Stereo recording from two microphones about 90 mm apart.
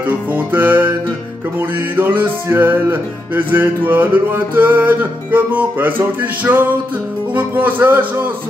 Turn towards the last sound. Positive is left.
turn(degrees=-20)  # may be behind; listen again after turning